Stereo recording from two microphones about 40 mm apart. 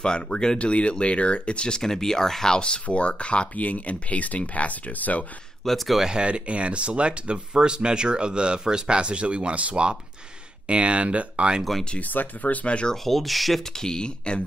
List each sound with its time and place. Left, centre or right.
0.0 s speech: left
0.6 s speech: left
1.8 s speech: centre; by 5.2 s left
5.6 s speech: centre
6.1 s speech: right
12.0 s speech: left
12.6 s speech: left
12.9 s speech: centre
13.7 s speech: centre